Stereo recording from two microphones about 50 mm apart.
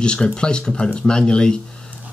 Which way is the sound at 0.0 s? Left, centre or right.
Centre.